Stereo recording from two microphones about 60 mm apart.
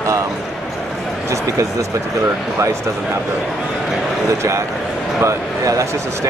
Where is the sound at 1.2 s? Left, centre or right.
Right.